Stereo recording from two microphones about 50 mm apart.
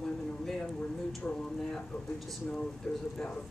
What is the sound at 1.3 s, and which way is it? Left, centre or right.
Speech, centre.